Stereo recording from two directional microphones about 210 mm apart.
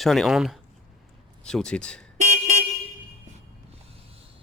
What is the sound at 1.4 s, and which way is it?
Speech, 5° left (ahead or behind).